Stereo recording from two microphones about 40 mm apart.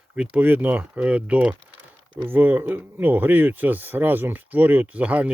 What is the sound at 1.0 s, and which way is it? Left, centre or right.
Speech, right.